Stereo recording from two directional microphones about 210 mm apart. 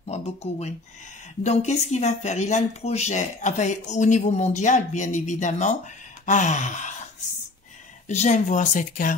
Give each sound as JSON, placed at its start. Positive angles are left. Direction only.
{"t": 0.0, "sound": "speech", "side_deg": 30}
{"t": 6.2, "sound": "a sound", "side_deg": 35}
{"t": 8.1, "sound": "speech", "side_deg": 35}